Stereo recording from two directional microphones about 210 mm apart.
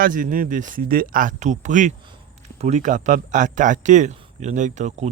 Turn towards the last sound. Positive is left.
turn(degrees=-30)  # may be behind; listen again after turning